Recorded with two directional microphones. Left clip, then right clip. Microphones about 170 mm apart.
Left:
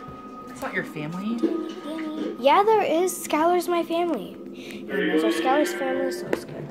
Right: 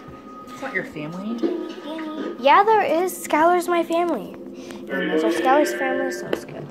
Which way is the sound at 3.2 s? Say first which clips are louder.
Right 4 dB; 5° right (ahead or behind).